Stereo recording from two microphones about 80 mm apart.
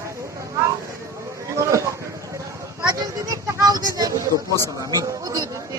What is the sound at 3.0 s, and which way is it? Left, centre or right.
Speech, right.